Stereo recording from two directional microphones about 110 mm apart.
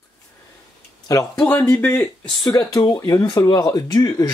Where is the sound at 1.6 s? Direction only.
10° left (ahead or behind).